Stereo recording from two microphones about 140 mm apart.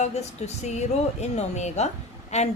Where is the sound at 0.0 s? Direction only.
50° left (ahead or behind).